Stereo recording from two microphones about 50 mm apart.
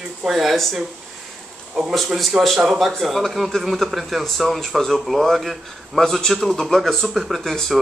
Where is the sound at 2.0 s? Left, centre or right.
Centre.